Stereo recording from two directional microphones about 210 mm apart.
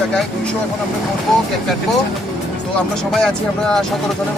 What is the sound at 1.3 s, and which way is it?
Speech, centre (ahead or behind).